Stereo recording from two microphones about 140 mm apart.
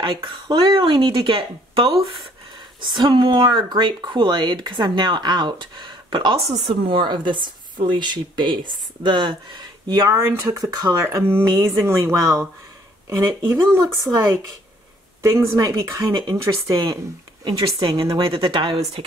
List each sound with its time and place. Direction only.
0.0 s speech: 35° right (ahead or behind)
13.6 s speech: 25° right (ahead or behind)
15.2 s speech: 20° right (ahead or behind)
18.3 s speech: 40° right (ahead or behind)